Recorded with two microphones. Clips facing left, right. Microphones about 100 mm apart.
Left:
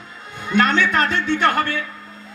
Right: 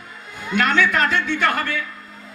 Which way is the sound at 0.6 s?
30° left (ahead or behind).